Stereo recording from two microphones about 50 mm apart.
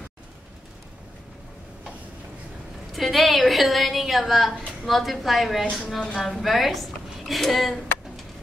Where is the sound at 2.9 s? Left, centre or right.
Centre.